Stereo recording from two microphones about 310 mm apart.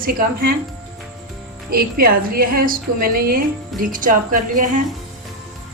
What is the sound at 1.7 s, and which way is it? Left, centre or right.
A woman's voice, right.